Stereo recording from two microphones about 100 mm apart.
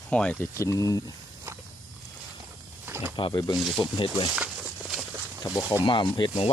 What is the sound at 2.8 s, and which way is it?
Snake, 20° right (ahead or behind).